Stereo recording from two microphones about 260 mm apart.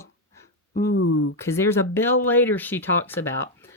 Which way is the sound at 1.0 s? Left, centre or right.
Left.